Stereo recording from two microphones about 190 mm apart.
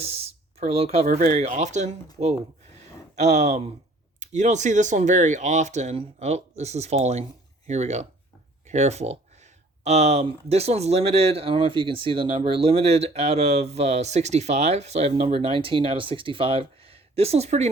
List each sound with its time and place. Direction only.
0.0 s speech: 35° right (ahead or behind)
3.2 s speech: 35° right (ahead or behind)